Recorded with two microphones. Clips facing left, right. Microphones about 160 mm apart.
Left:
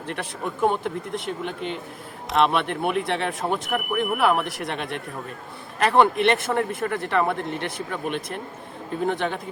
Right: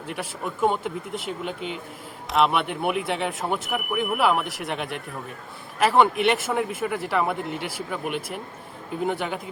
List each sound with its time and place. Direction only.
0.1 s speech: 5° right (ahead or behind)